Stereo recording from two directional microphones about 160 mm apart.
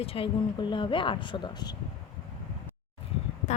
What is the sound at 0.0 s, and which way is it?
Speech, 35° left (ahead or behind).